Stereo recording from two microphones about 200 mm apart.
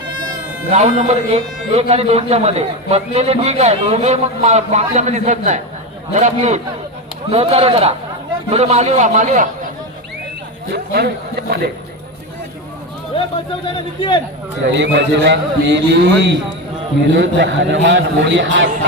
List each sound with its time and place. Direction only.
0.7 s speech: 35° right (ahead or behind)
10.7 s speech: 50° right (ahead or behind)
13.7 s a man's voice: 25° left (ahead or behind)
14.7 s a man's voice: 60° right (ahead or behind)